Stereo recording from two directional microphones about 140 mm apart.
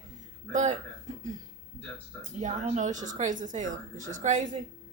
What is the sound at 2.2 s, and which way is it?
A woman's voice, 55° right (ahead or behind).